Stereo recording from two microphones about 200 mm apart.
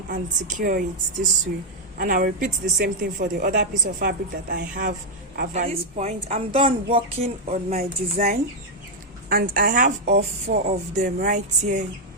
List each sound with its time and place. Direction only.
0.1 s a woman's voice: 40° right (ahead or behind)
2.0 s speech: 45° right (ahead or behind)
5.4 s a woman's voice: 35° right (ahead or behind)
9.3 s speech: 45° right (ahead or behind)
10.2 s a woman's voice: 35° right (ahead or behind)